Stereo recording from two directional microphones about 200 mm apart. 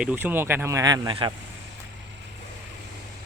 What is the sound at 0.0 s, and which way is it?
Speech, 10° right (ahead or behind).